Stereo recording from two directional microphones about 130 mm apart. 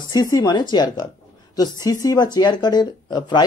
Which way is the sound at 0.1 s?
30° left (ahead or behind).